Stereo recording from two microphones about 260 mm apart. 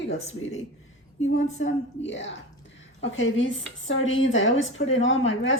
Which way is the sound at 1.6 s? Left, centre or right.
Left.